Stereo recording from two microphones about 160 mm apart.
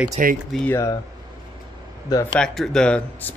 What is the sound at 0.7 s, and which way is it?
Speech, 20° left (ahead or behind).